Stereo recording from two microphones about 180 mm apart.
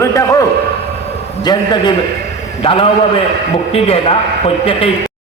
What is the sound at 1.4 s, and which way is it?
Speech, 25° left (ahead or behind).